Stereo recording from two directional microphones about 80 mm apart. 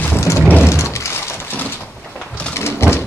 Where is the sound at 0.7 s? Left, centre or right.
Left.